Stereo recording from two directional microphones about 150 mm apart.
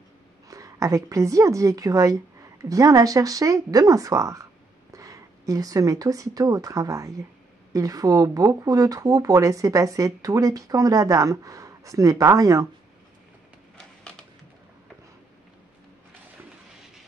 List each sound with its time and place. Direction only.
0.5 s speech: 20° right (ahead or behind)